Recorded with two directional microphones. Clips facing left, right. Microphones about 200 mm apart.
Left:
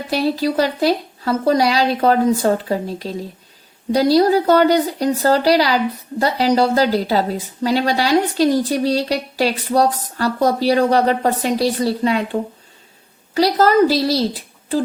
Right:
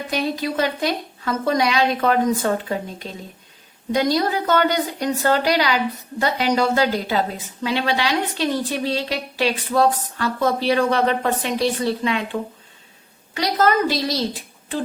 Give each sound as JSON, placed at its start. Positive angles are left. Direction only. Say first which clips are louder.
{"t": 0.1, "sound": "a woman's voice", "louder": "left 6 dB", "side_deg": 35}